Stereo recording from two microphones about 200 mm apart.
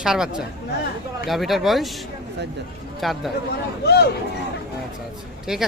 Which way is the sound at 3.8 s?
55° left (ahead or behind).